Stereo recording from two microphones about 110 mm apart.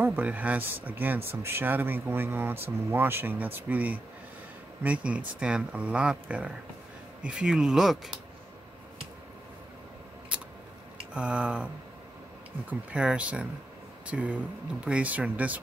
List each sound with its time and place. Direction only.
0.0 s speech: 15° right (ahead or behind)
10.3 s a sound: 10° right (ahead or behind)
11.1 s speech: 10° right (ahead or behind)